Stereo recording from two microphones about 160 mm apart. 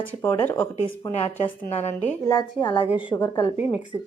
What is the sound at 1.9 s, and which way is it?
A woman's voice, 20° left (ahead or behind).